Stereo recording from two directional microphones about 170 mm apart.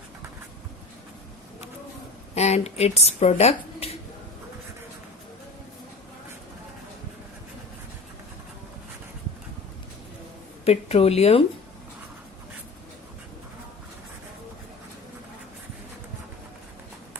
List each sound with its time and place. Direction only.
2.3 s speech: 40° left (ahead or behind)
10.7 s speech: 35° left (ahead or behind)